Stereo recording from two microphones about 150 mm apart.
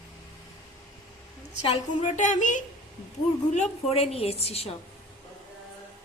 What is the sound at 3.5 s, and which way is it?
A woman's voice, 45° left (ahead or behind).